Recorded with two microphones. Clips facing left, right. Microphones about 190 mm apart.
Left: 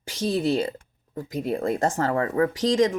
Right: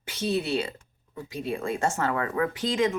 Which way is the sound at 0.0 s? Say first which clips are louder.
Left 2 dB; 30° left (ahead or behind).